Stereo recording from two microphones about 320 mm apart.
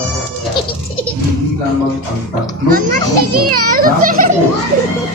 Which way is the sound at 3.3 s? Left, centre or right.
Right.